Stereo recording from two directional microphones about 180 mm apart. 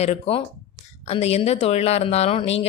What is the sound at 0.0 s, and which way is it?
Speech, 35° left (ahead or behind).